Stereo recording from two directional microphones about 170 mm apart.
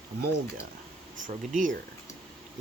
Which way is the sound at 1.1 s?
50° right (ahead or behind).